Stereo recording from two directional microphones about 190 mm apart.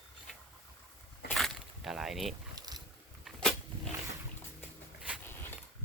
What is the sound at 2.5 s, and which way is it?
Boat, 20° right (ahead or behind).